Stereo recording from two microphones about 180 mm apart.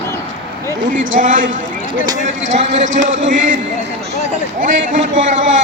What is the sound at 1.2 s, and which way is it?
Speech, 45° right (ahead or behind).